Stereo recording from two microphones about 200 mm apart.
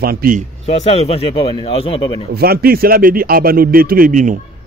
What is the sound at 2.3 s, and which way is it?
Speech, 50° right (ahead or behind).